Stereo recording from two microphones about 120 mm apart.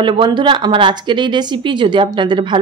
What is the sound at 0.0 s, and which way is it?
Speech, 40° right (ahead or behind).